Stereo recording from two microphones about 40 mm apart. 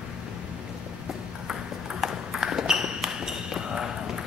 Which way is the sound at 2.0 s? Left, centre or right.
Centre.